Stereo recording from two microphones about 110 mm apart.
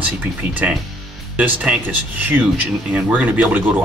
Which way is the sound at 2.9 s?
15° right (ahead or behind).